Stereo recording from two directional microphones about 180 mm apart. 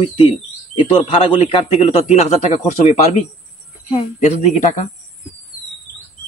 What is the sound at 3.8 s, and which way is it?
A man's voice, 40° left (ahead or behind).